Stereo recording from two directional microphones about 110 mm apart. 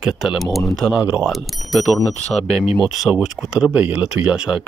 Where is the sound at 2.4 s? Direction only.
70° left (ahead or behind).